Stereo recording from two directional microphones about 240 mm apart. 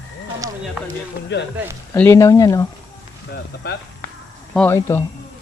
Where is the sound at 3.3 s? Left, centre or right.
Left.